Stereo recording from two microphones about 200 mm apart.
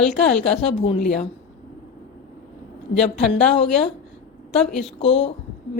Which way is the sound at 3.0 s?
35° left (ahead or behind).